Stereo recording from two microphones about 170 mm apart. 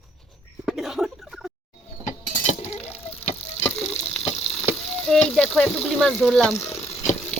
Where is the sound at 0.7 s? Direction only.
Centre (ahead or behind).